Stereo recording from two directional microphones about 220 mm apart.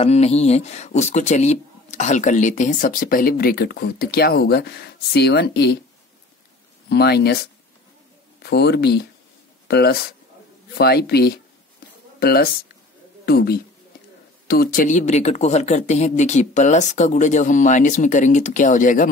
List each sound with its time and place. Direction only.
0.0 s speech: 30° left (ahead or behind); by 5.8 s 50° left (ahead or behind)
6.9 s speech: 50° left (ahead or behind)
8.4 s speech: 50° left (ahead or behind)